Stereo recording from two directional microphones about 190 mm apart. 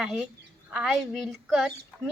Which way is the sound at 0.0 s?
5° right (ahead or behind).